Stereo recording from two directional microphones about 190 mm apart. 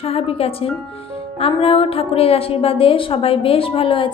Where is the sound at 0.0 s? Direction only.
30° left (ahead or behind).